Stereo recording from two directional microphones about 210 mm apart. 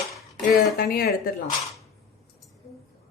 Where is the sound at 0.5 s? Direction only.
45° left (ahead or behind).